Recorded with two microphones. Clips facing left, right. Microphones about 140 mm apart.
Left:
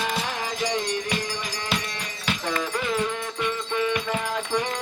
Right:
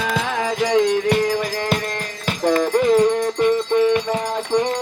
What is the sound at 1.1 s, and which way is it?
Music, 55° right (ahead or behind).